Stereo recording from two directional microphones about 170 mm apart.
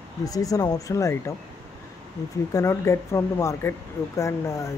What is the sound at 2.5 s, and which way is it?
Speech, 15° left (ahead or behind).